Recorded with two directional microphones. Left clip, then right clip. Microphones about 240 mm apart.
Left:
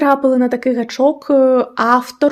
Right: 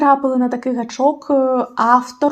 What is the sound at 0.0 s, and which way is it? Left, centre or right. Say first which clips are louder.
Speech: left 1 dB; left.